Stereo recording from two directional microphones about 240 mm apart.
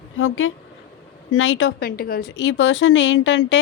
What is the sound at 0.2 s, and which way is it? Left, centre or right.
A woman's voice, left.